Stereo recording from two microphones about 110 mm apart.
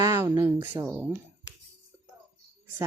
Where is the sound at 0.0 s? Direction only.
30° right (ahead or behind).